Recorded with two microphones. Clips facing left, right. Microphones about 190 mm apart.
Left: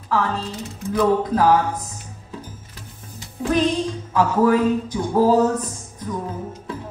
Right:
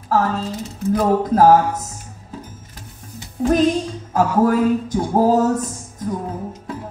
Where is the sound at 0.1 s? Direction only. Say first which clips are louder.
Right 3 dB; 45° right (ahead or behind).